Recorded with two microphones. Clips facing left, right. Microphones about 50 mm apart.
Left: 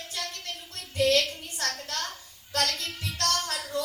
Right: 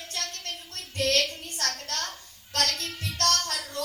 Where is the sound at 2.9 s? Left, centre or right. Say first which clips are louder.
Right 2 dB; right.